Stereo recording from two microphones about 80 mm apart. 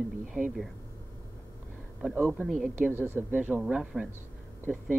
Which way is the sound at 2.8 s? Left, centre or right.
Right.